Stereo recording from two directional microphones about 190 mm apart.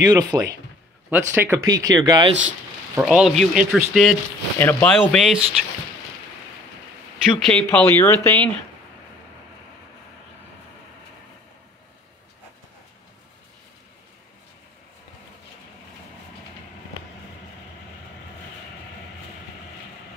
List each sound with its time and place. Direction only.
0.1 s speech: 20° right (ahead or behind)
3.0 s speech: centre (ahead or behind)
7.3 s speech: 5° left (ahead or behind)